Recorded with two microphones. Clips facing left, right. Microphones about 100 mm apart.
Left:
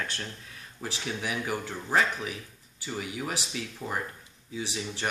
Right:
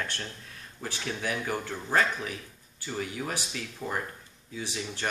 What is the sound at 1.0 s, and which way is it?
Speech, 10° left (ahead or behind).